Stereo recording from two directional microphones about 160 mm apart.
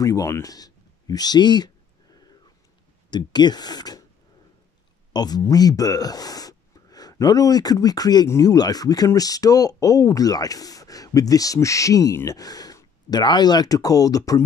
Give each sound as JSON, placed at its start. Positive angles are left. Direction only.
{"t": 0.0, "sound": "speech", "side_deg": 20}
{"t": 3.1, "sound": "speech", "side_deg": 25}
{"t": 5.1, "sound": "speech", "side_deg": 25}